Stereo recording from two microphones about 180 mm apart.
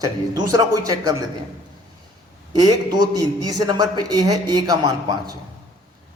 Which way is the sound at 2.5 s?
20° right (ahead or behind).